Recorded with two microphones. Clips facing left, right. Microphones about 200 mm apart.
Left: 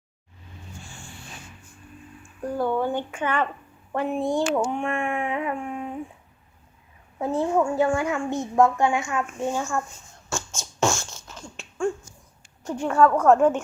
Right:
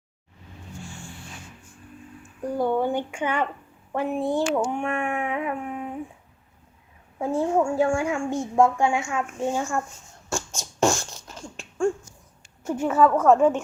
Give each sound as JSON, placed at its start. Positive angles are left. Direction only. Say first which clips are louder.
{"t": 2.5, "sound": "a woman's voice", "louder": "right 1 dB", "side_deg": -15}
{"t": 7.2, "sound": "a woman's voice", "louder": "even", "side_deg": -10}
{"t": 10.8, "sound": "beatboxing", "louder": "right 2 dB", "side_deg": -35}
{"t": 12.6, "sound": "speech", "louder": "even", "side_deg": -5}